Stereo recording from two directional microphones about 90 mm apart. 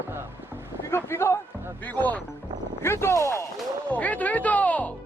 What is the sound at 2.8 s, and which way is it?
Music, 30° left (ahead or behind).